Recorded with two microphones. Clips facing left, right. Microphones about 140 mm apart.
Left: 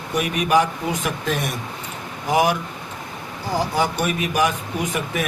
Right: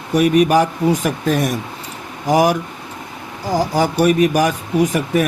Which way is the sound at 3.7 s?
40° right (ahead or behind).